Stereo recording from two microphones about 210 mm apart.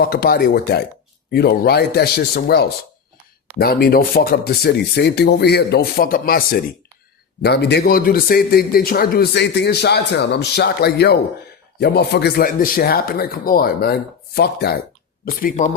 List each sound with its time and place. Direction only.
0.0 s a man's voice: 45° left (ahead or behind)